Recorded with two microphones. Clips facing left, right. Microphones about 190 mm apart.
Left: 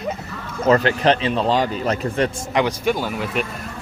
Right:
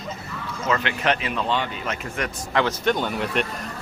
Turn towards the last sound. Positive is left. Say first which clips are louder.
# left 1 dB
turn(degrees=0)  # may be behind; listen again after turning